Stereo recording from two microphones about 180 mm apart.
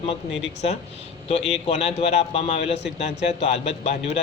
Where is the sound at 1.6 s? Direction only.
35° left (ahead or behind).